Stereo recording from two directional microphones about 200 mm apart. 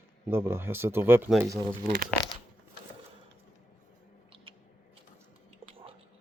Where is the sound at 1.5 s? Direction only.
15° right (ahead or behind).